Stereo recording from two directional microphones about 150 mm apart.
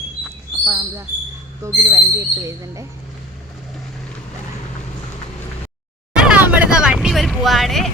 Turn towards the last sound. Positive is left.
turn(degrees=0)  # may be behind; listen again after turning